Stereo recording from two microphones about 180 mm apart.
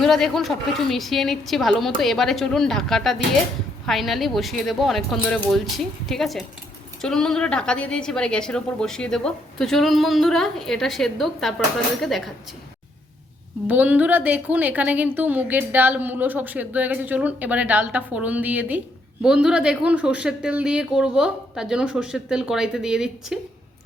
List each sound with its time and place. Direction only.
0.0 s a woman's voice: centre (ahead or behind)
13.7 s a woman's voice: 10° right (ahead or behind)